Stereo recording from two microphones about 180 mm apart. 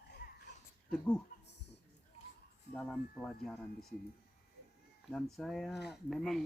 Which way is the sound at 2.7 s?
5° left (ahead or behind).